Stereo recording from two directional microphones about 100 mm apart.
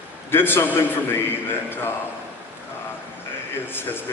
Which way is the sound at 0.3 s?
20° left (ahead or behind).